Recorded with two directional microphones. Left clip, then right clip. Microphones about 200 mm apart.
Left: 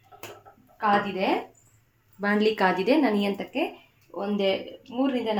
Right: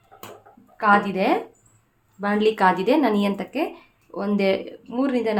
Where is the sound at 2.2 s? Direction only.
5° right (ahead or behind); by 3.7 s 25° right (ahead or behind).